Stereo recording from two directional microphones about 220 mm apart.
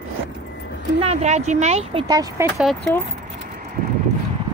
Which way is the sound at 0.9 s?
30° right (ahead or behind).